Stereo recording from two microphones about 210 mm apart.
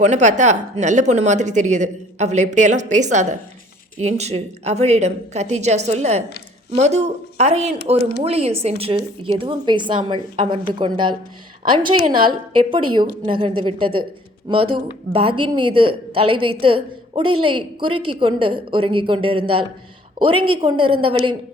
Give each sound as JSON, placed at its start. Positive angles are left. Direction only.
{"t": 0.0, "sound": "a woman's voice", "side_deg": -35}
{"t": 12.2, "sound": "speech", "side_deg": -25}
{"t": 20.3, "sound": "a woman's voice", "side_deg": -90}
{"t": 20.6, "sound": "speech", "side_deg": -25}